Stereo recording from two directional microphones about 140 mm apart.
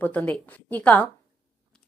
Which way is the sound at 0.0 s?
10° left (ahead or behind).